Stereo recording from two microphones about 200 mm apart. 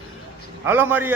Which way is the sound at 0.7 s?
10° right (ahead or behind).